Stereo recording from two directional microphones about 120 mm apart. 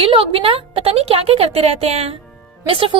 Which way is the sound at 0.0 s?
50° right (ahead or behind).